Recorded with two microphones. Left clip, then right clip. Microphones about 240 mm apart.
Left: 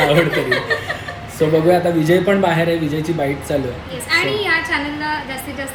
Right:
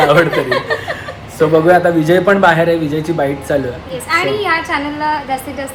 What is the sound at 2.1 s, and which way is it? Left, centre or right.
Speech, centre.